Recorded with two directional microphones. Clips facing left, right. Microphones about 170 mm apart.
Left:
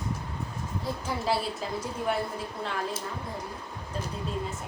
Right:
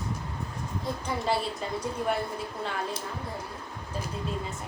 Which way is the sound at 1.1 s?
Centre (ahead or behind).